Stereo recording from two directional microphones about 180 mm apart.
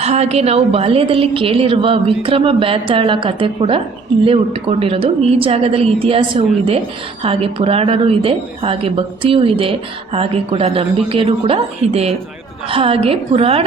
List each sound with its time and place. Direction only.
0.0 s speech: 35° right (ahead or behind)